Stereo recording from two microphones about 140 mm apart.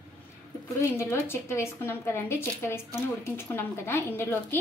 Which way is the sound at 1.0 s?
20° left (ahead or behind).